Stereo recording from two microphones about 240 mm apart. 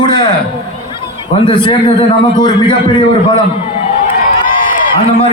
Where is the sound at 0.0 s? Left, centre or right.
Centre.